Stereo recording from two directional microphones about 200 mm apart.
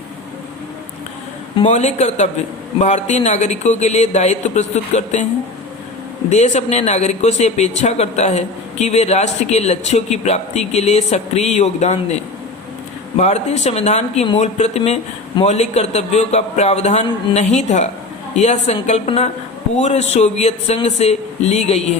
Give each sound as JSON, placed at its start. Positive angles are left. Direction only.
{"t": 1.5, "sound": "speech", "side_deg": 35}
{"t": 6.3, "sound": "speech", "side_deg": 35}